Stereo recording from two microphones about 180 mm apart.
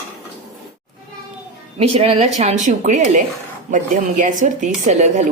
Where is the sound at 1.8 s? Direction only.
35° right (ahead or behind).